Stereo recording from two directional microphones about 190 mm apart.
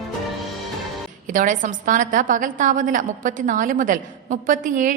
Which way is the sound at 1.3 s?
45° right (ahead or behind).